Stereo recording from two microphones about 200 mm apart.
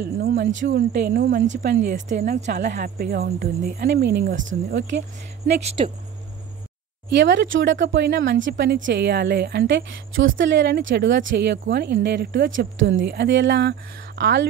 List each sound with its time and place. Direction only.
0.0 s a woman's voice: 55° right (ahead or behind)
5.8 s speech: 30° right (ahead or behind)
7.1 s a woman's voice: 60° right (ahead or behind)